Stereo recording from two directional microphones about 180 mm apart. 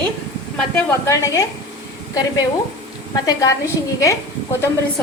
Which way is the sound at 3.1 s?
20° left (ahead or behind).